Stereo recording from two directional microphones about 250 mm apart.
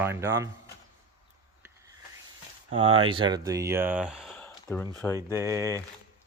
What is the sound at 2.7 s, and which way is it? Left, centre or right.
Speech, right.